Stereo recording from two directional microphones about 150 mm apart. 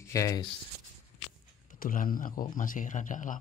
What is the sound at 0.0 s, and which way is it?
Speech, 20° left (ahead or behind).